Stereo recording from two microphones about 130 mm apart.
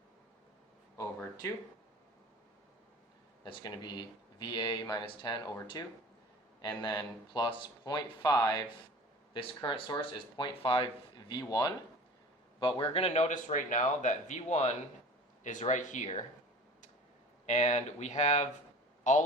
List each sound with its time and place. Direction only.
3.4 s speech: 35° left (ahead or behind)
9.3 s speech: 40° left (ahead or behind)
11.3 s speech: 35° left (ahead or behind)
12.5 s a man's voice: 45° left (ahead or behind); by 14.8 s 60° left (ahead or behind)
15.4 s speech: 75° left (ahead or behind)
17.4 s a man's voice: 60° left (ahead or behind)